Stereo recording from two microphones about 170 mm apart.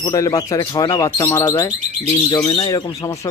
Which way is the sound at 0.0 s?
25° left (ahead or behind).